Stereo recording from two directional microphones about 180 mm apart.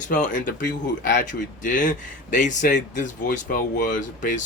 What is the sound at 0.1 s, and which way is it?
Speech, 45° left (ahead or behind).